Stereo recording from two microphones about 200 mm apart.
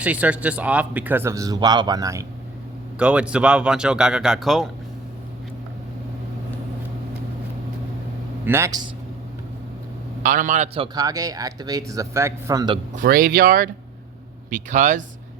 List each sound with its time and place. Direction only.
0.0 s a man's voice: 5° right (ahead or behind)
3.0 s speech: 5° right (ahead or behind)
8.4 s a man's voice: 15° right (ahead or behind)
10.2 s a man's voice: 40° right (ahead or behind)
10.9 s a man's voice: 20° right (ahead or behind)
13.0 s a man's voice: 45° right (ahead or behind)